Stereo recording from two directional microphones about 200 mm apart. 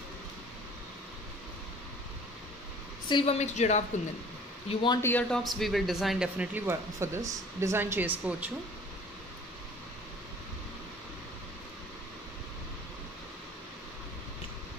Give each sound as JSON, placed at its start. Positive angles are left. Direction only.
{"t": 3.1, "sound": "a woman's voice", "side_deg": 30}
{"t": 4.6, "sound": "speech", "side_deg": 20}
{"t": 5.1, "sound": "speech", "side_deg": 5}